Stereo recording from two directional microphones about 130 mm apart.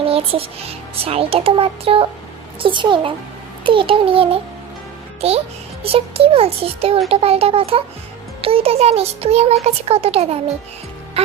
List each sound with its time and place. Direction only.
0.0 s a child's voice: 50° right (ahead or behind)